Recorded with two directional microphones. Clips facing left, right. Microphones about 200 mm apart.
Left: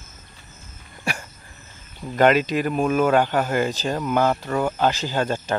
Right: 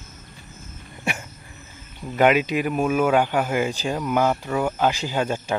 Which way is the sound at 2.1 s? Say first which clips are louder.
Left 1 dB; 10° right (ahead or behind).